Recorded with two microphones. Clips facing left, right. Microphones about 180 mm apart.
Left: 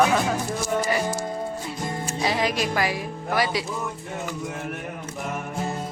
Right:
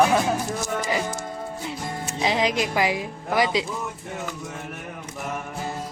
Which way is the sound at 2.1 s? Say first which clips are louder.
Right 2 dB; 20° right (ahead or behind).